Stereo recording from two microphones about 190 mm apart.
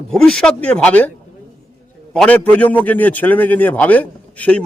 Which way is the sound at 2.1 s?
5° left (ahead or behind).